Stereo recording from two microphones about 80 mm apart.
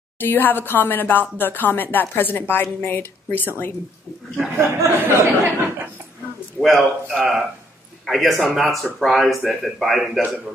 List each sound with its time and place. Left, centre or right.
0.2 s speech: left
4.6 s speech: right
6.6 s speech: centre